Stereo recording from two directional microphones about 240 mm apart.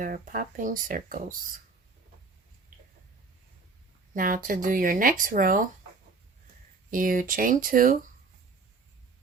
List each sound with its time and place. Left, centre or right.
0.0 s speech: right
4.1 s speech: right
6.9 s speech: right